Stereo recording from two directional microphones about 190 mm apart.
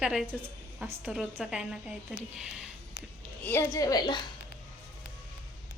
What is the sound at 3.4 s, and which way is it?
Speech, 15° left (ahead or behind).